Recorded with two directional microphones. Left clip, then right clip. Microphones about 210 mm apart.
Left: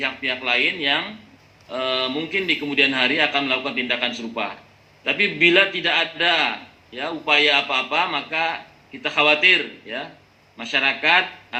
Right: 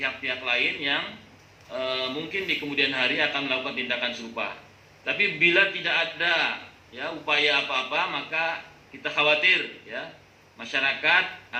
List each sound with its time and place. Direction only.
0.0 s a man's voice: 45° left (ahead or behind)